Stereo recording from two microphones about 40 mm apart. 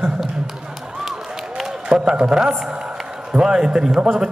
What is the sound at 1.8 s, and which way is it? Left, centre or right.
Speech, centre.